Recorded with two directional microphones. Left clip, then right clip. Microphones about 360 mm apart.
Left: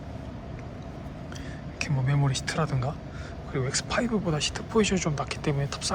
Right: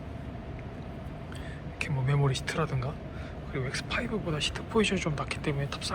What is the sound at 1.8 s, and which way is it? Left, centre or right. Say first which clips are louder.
Speech: left 1 dB; centre.